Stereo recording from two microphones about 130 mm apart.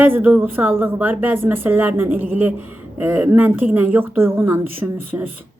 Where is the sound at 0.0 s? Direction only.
15° right (ahead or behind).